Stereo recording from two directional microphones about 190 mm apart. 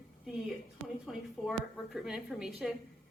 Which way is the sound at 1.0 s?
Centre (ahead or behind).